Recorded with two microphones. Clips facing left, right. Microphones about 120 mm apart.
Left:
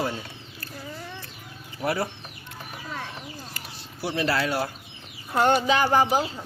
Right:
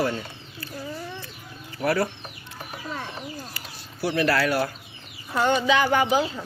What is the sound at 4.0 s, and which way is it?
Speech, 25° left (ahead or behind).